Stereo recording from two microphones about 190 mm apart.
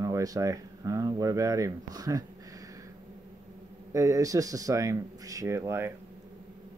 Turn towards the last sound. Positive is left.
turn(degrees=-15)  # may be behind; listen again after turning